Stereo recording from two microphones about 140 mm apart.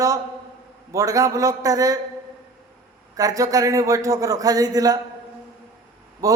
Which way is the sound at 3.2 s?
25° right (ahead or behind).